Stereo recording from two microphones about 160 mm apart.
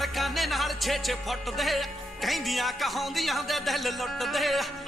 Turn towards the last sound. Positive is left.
turn(degrees=0)  # may be behind; listen again after turning